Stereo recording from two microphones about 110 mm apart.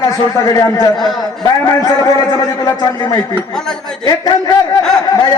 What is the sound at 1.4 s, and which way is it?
A man's voice, 35° left (ahead or behind).